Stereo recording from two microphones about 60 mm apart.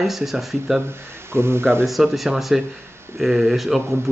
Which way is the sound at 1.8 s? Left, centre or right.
Centre.